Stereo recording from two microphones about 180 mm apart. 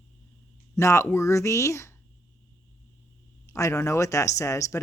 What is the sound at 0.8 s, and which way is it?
Speech, 15° left (ahead or behind).